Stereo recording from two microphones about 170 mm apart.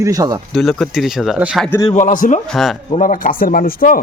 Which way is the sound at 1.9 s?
50° left (ahead or behind).